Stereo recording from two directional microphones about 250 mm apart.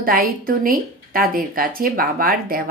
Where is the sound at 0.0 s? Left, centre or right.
Right.